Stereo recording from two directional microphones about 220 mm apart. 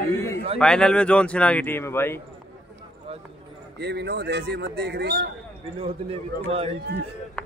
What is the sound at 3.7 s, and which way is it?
A man's voice, 50° right (ahead or behind).